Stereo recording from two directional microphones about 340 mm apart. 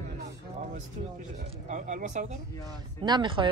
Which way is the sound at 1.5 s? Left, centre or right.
Right.